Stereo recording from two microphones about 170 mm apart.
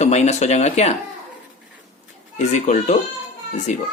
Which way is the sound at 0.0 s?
40° left (ahead or behind).